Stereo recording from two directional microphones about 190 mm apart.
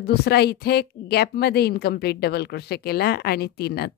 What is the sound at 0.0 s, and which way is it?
A woman's voice, 60° left (ahead or behind).